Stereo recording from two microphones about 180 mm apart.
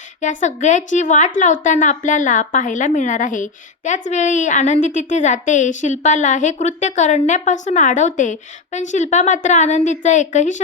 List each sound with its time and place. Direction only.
0.2 s a woman's voice: 45° left (ahead or behind)